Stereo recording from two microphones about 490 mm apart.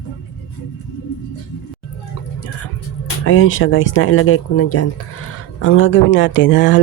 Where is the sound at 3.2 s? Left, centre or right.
Left.